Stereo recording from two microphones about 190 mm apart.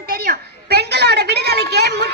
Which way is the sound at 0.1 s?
55° right (ahead or behind).